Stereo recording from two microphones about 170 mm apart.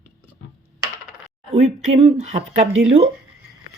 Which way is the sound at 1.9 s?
40° right (ahead or behind).